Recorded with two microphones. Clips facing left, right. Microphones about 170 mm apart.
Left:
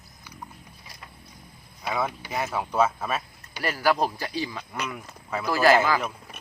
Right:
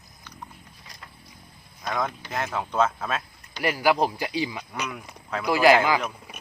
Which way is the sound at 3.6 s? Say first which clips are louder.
Right 2 dB; 15° right (ahead or behind).